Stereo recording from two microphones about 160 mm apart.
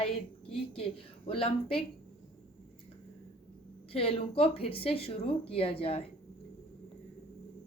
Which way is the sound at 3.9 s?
35° left (ahead or behind).